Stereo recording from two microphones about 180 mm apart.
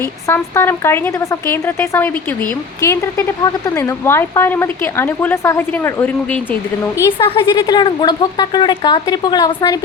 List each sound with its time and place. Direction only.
0.3 s speech: 15° left (ahead or behind)
7.2 s a woman's voice: 25° left (ahead or behind)